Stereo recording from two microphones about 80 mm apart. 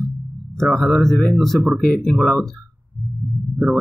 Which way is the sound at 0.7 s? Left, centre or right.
Centre.